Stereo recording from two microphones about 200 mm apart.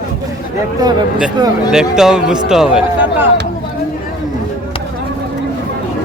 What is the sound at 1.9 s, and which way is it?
Speech, 5° right (ahead or behind).